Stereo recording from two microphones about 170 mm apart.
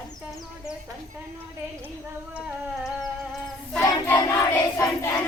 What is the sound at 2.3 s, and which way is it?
Humming, 5° right (ahead or behind).